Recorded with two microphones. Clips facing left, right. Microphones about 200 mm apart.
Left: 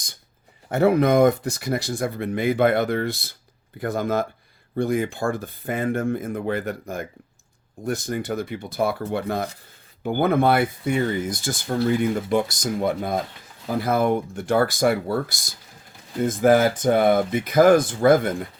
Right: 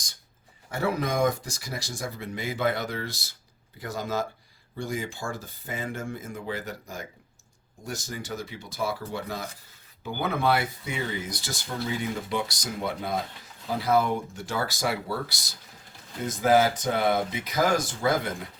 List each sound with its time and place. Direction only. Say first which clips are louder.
0.7 s speech: left 10 dB; 60° left (ahead or behind)